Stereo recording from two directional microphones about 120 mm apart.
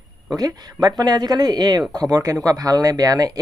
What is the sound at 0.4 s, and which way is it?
Speech, 30° right (ahead or behind).